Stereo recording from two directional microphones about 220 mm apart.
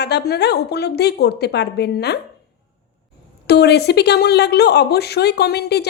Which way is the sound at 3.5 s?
50° left (ahead or behind).